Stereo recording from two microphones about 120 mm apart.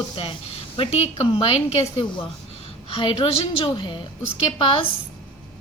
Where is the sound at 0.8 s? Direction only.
55° left (ahead or behind).